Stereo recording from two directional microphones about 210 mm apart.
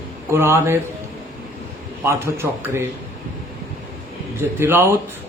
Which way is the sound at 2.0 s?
10° right (ahead or behind).